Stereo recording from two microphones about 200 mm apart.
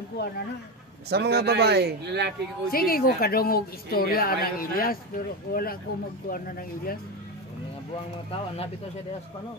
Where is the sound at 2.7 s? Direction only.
45° left (ahead or behind).